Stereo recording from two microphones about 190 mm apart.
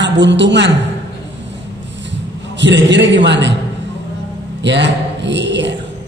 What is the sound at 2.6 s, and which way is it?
Speech, 70° right (ahead or behind).